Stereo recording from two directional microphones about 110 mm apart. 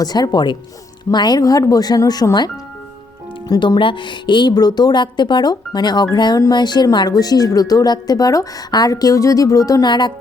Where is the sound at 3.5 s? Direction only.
45° left (ahead or behind).